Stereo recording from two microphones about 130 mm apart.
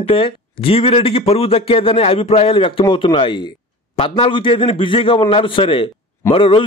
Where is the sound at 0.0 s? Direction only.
45° left (ahead or behind).